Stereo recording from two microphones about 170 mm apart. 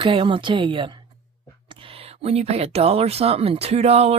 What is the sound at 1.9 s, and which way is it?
A woman's voice, 35° right (ahead or behind).